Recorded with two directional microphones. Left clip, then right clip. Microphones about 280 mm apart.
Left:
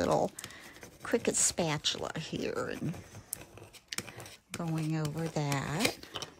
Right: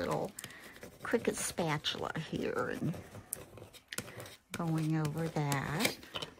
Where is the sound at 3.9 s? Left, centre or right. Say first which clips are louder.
Left 3 dB; centre.